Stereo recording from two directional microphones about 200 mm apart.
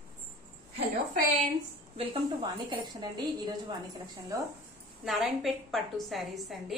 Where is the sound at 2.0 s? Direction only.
20° right (ahead or behind).